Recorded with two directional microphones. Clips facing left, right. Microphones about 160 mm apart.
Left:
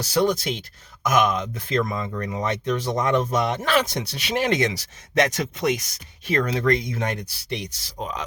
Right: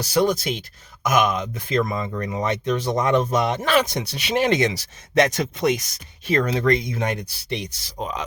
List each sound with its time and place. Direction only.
0.0 s speech: 15° right (ahead or behind)